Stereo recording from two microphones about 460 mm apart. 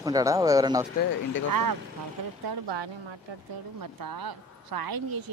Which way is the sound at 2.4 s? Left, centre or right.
Right.